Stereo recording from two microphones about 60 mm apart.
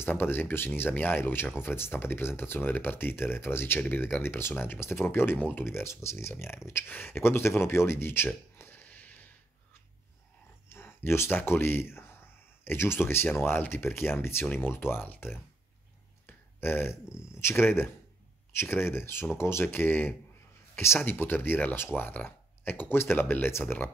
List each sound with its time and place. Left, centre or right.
0.0 s speech: left
5.7 s speech: left
8.7 s a sound: left
10.7 s speech: left
16.3 s a sound: left
17.3 s speech: left
21.0 s speech: left